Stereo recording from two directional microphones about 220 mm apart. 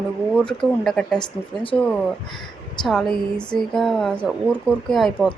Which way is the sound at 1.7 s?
5° left (ahead or behind).